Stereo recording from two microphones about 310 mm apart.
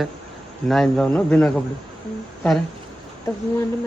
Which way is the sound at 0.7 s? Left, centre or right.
Centre.